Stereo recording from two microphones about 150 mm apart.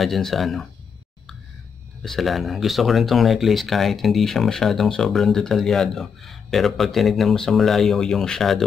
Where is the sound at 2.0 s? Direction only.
Centre (ahead or behind).